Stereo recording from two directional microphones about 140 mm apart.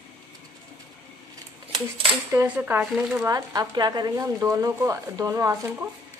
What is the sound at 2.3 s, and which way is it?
Speech, 10° right (ahead or behind).